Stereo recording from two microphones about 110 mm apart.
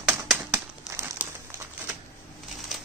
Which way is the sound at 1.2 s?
15° right (ahead or behind).